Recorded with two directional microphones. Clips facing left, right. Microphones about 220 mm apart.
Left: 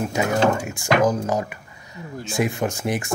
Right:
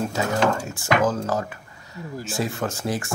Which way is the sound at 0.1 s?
15° left (ahead or behind).